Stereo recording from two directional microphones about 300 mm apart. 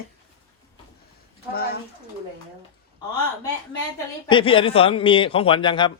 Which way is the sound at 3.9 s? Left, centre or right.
Centre.